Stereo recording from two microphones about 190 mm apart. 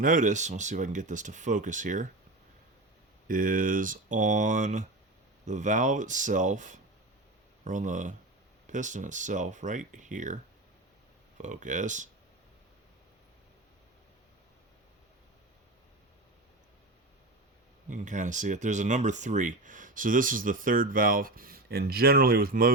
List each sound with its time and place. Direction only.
0.0 s speech: 45° right (ahead or behind)
3.2 s speech: 45° right (ahead or behind)
11.3 s speech: 40° right (ahead or behind)
17.8 s speech: 40° right (ahead or behind)